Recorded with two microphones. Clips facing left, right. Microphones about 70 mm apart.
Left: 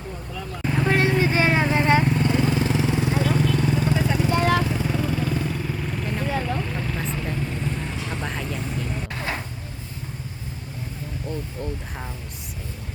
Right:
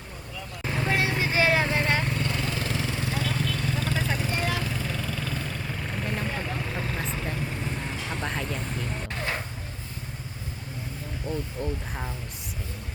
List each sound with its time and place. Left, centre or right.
0.6 s vehicle: centre
0.9 s vehicle: left
4.3 s vehicle: left
4.6 s vehicle: centre
5.6 s vehicle: centre
11.3 s speech: centre